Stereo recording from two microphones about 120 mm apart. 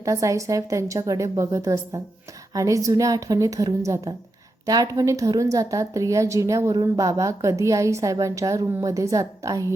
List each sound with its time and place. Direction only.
0.0 s a woman's voice: 25° right (ahead or behind)